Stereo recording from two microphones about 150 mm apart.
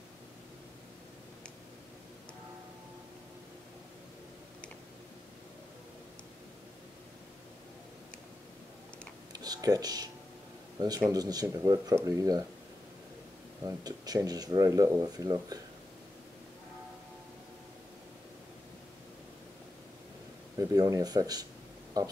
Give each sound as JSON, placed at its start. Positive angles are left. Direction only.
{"t": 9.3, "sound": "computer keyboard", "side_deg": -25}
{"t": 11.1, "sound": "speech", "side_deg": -25}
{"t": 13.7, "sound": "speech", "side_deg": -25}
{"t": 20.5, "sound": "speech", "side_deg": -25}